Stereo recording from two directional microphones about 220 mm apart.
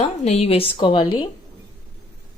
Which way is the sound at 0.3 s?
30° left (ahead or behind).